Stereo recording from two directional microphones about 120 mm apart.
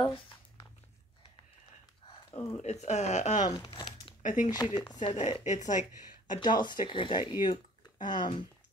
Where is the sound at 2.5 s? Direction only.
65° left (ahead or behind).